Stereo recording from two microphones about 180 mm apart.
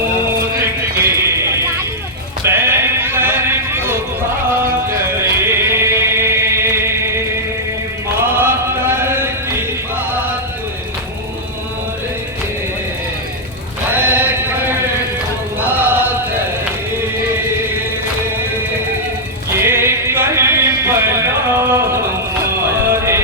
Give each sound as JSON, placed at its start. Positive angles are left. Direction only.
{"t": 0.9, "sound": "music", "side_deg": -15}
{"t": 2.5, "sound": "sheep", "side_deg": -10}
{"t": 4.6, "sound": "music", "side_deg": -15}
{"t": 8.2, "sound": "chant", "side_deg": -10}
{"t": 13.9, "sound": "a sound", "side_deg": -10}
{"t": 19.5, "sound": "music", "side_deg": -15}